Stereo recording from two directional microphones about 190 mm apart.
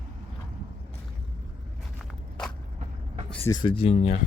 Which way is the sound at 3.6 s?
30° left (ahead or behind).